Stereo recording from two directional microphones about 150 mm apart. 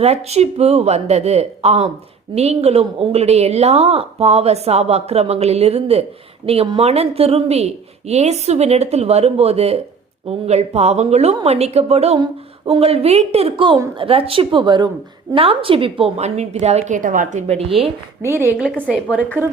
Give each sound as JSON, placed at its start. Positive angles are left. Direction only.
{"t": 0.0, "sound": "a woman's voice", "side_deg": -45}
{"t": 12.2, "sound": "a sound", "side_deg": -30}
{"t": 12.8, "sound": "a woman's voice", "side_deg": -40}
{"t": 18.2, "sound": "a woman's voice", "side_deg": -15}
{"t": 18.5, "sound": "a woman's voice", "side_deg": 5}
{"t": 19.4, "sound": "a woman's voice", "side_deg": -15}